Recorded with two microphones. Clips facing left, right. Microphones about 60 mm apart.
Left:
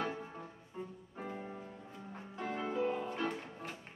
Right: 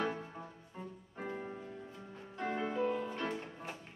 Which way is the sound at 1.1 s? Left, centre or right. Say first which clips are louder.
Right 2 dB; centre.